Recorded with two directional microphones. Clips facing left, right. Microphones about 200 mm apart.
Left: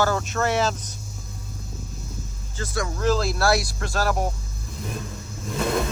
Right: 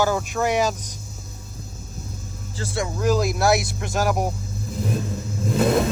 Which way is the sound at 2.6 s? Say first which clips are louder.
Right 1 dB; 30° right (ahead or behind).